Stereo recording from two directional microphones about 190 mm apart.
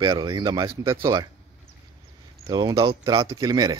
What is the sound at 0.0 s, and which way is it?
Speech, 20° right (ahead or behind).